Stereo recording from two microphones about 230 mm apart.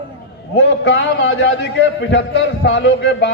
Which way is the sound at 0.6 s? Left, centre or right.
Left.